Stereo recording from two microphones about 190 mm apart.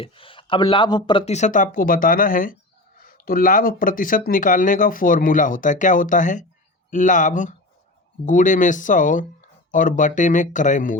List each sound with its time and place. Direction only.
0.0 s speech: 30° left (ahead or behind)